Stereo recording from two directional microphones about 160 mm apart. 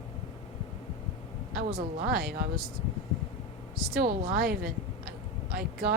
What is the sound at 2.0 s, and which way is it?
Speech, 75° right (ahead or behind).